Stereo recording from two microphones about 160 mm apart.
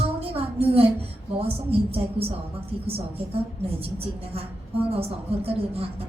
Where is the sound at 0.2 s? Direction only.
35° right (ahead or behind).